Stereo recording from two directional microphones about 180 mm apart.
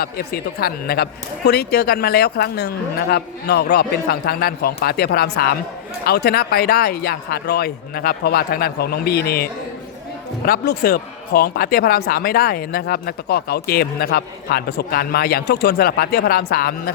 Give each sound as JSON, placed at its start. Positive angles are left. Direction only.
{"t": 0.0, "sound": "speech", "side_deg": 60}